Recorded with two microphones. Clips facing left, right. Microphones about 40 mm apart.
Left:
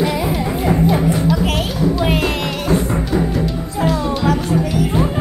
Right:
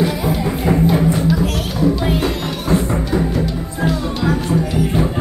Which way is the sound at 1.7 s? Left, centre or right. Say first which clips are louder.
Even; centre.